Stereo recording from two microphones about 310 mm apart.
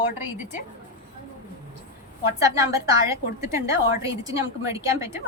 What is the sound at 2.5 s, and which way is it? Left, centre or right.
A woman's voice, centre.